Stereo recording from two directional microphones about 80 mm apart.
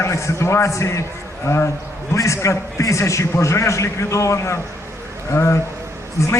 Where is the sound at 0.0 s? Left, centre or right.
Left.